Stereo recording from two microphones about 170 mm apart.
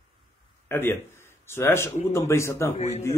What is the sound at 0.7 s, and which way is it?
Speech, 15° left (ahead or behind).